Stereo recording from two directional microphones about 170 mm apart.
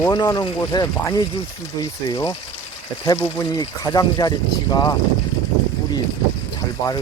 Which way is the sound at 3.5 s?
25° left (ahead or behind).